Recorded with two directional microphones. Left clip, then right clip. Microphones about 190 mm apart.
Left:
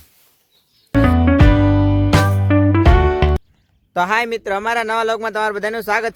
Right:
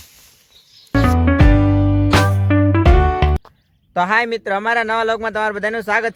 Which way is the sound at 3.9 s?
15° left (ahead or behind).